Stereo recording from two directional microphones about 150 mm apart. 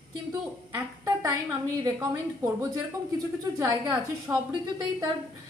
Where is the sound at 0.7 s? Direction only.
20° right (ahead or behind).